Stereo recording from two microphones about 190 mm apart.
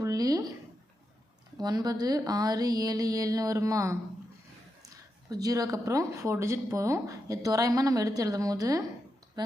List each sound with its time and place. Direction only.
0.0 s a sound: 20° right (ahead or behind)
1.6 s speech: 20° right (ahead or behind)
5.3 s speech: 20° right (ahead or behind)